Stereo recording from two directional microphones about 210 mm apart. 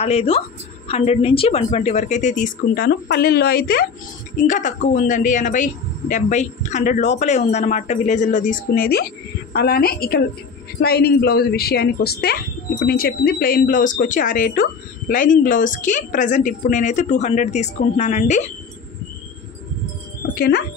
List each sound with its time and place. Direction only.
0.0 s a woman's voice: 30° left (ahead or behind)
20.3 s speech: 50° left (ahead or behind)